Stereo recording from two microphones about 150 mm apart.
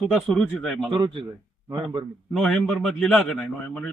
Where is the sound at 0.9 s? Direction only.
30° right (ahead or behind).